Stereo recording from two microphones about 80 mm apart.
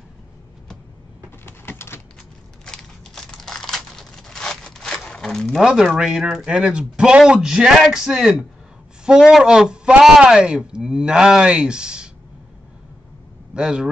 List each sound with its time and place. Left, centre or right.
1.4 s a sound: left
2.6 s crumpling: centre
5.6 s speech: centre
13.6 s speech: centre